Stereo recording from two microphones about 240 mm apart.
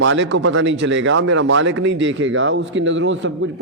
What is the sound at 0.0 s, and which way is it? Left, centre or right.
Speech, right.